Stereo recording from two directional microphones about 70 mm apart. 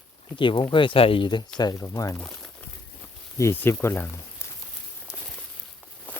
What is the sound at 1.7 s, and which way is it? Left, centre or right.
Speech, left.